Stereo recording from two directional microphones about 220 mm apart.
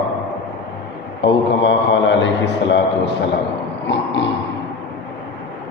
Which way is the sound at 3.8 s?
55° left (ahead or behind).